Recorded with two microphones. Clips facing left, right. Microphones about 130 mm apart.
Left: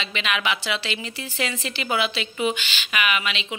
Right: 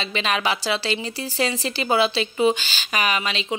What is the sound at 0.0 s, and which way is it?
Speech, 35° right (ahead or behind).